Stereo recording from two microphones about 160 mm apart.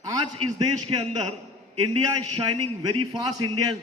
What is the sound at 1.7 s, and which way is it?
A man's voice, 25° right (ahead or behind).